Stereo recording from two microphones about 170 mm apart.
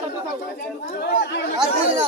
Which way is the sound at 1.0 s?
80° left.